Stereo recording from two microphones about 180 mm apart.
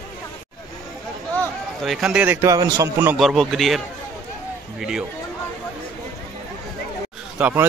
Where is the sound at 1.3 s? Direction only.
Centre (ahead or behind); by 3.2 s 15° right (ahead or behind).